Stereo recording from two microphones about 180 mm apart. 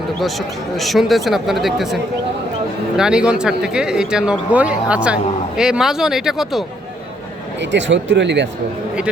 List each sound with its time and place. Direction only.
0.8 s speech: centre (ahead or behind)
3.0 s speech: 5° right (ahead or behind)
7.6 s speech: 85° right